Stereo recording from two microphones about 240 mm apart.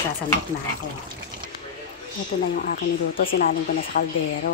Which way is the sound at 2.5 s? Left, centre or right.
Left.